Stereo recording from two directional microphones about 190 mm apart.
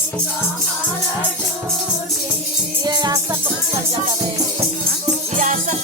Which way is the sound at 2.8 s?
20° right (ahead or behind).